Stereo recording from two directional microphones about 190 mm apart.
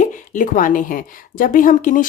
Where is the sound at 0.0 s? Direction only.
40° left (ahead or behind).